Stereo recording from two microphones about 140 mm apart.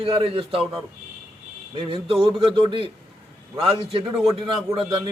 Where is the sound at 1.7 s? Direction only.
35° right (ahead or behind).